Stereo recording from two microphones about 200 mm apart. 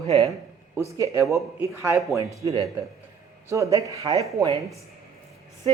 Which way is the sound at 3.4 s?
15° right (ahead or behind).